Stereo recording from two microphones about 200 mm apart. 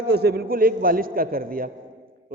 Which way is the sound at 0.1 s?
55° right (ahead or behind).